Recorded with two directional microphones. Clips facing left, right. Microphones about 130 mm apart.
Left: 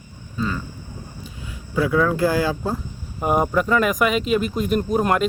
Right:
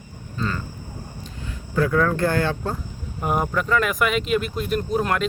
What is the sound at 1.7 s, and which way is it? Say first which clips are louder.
Speech: left 1 dB; 10° left (ahead or behind).